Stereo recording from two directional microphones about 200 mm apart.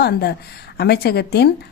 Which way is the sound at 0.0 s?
55° left (ahead or behind).